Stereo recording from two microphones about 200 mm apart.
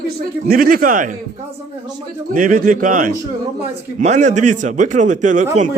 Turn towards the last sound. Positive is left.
turn(degrees=-40)  # may be behind; listen again after turning